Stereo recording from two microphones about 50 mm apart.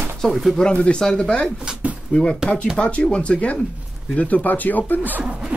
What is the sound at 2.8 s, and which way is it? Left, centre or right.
Speech, left.